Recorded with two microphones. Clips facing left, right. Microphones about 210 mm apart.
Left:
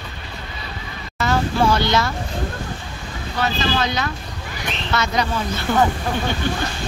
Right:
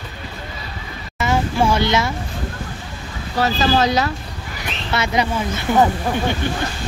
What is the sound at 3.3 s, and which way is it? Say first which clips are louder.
Speech: right 4 dB; 40° right (ahead or behind).